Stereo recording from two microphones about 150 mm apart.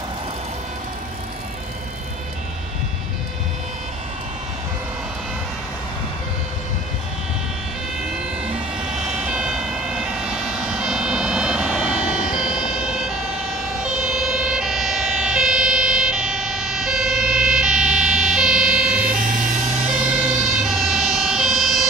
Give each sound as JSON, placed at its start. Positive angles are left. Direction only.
{"t": 9.2, "sound": "emergency vehicle", "side_deg": -5}
{"t": 12.2, "sound": "emergency vehicle", "side_deg": 55}
{"t": 12.7, "sound": "emergency vehicle", "side_deg": -5}
{"t": 19.0, "sound": "vehicle", "side_deg": -65}
{"t": 20.5, "sound": "emergency vehicle", "side_deg": 0}